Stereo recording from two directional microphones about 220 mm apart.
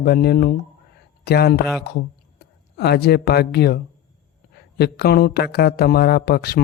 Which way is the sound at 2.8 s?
45° left (ahead or behind).